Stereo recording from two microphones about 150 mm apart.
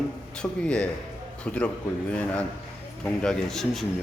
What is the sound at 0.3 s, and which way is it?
A man's voice, 5° left (ahead or behind).